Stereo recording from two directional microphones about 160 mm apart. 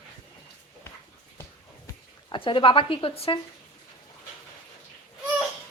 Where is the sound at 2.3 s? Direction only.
30° left (ahead or behind).